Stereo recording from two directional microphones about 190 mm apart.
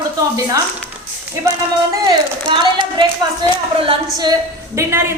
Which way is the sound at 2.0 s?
25° right (ahead or behind).